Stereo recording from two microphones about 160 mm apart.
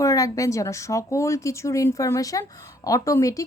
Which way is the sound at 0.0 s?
20° left (ahead or behind).